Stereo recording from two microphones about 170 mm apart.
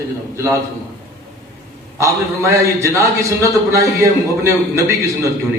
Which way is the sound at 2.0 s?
15° right (ahead or behind).